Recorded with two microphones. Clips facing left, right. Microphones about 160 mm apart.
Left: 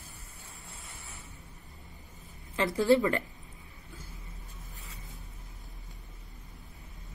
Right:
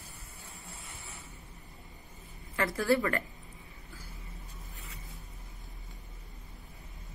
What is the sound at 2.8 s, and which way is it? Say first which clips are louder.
Speech: left 4 dB; 20° left (ahead or behind).